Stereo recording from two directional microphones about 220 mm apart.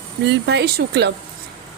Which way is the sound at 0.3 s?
50° right (ahead or behind).